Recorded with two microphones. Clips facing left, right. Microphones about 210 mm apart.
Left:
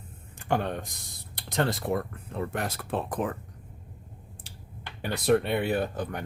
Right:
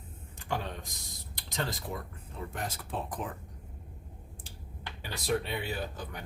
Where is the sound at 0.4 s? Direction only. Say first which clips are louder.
Left 8 dB; 60° left (ahead or behind).